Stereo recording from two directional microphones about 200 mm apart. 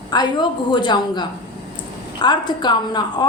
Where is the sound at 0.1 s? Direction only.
20° left (ahead or behind).